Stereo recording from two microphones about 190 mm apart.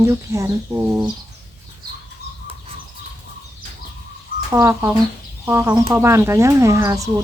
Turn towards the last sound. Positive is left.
turn(degrees=-15)  # may be behind; listen again after turning